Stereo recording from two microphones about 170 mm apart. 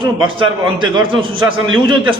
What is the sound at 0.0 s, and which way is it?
A man's voice, 30° right (ahead or behind).